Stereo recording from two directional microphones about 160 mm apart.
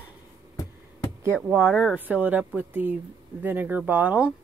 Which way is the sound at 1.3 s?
10° right (ahead or behind).